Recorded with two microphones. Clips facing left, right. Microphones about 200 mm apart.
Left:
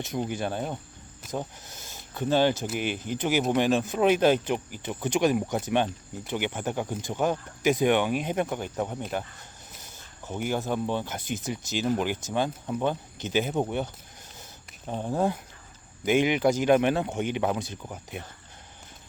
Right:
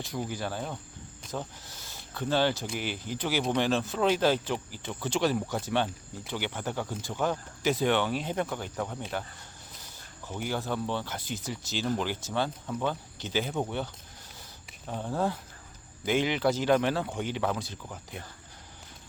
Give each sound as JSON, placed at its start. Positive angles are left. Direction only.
{"t": 0.0, "sound": "speech", "side_deg": 20}
{"t": 10.2, "sound": "speech", "side_deg": 15}